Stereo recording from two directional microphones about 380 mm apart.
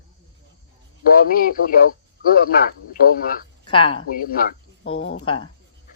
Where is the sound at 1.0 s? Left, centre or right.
Left.